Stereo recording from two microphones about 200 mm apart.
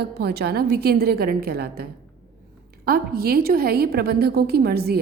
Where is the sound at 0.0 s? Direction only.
55° right (ahead or behind).